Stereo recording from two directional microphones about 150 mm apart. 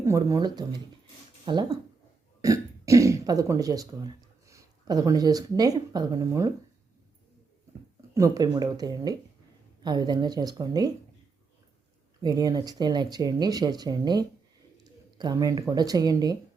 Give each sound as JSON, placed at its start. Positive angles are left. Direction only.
{"t": 0.0, "sound": "speech", "side_deg": -20}
{"t": 8.1, "sound": "speech", "side_deg": -25}
{"t": 12.2, "sound": "speech", "side_deg": -25}